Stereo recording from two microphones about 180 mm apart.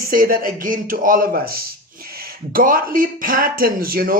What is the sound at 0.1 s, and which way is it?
Speech, 55° right (ahead or behind).